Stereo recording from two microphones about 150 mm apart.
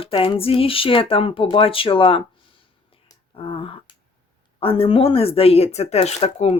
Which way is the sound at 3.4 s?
40° left (ahead or behind).